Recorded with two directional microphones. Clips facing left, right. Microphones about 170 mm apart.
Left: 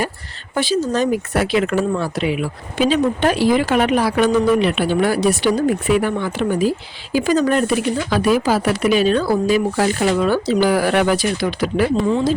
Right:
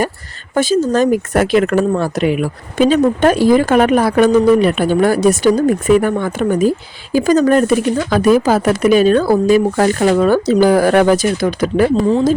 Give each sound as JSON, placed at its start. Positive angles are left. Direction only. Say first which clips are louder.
{"t": 0.5, "sound": "speech", "louder": "right 5 dB", "side_deg": -45}